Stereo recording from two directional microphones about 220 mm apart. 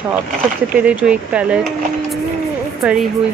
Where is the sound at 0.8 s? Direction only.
5° right (ahead or behind).